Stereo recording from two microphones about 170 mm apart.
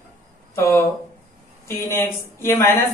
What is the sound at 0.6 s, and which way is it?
Speech, 15° left (ahead or behind).